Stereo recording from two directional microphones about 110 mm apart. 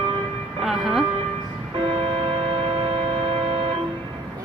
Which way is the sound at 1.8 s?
60° right (ahead or behind).